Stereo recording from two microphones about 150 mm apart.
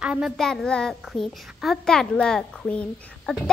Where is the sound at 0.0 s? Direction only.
5° right (ahead or behind).